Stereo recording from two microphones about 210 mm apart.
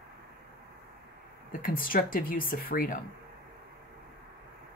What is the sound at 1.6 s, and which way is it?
Speech, 45° left (ahead or behind).